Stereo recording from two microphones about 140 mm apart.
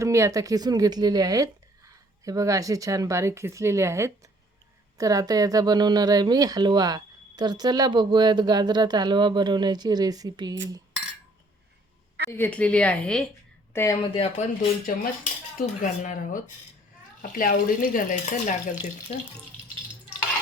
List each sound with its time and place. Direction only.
0.0 s a woman's voice: 20° right (ahead or behind)
12.3 s a woman's voice: 15° left (ahead or behind)
13.7 s a woman's voice: 15° left (ahead or behind)
14.1 s speech: 45° left (ahead or behind)
14.8 s speech: 70° left (ahead or behind)